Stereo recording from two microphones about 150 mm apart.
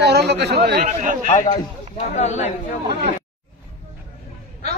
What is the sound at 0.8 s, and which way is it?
Speech, 55° right (ahead or behind).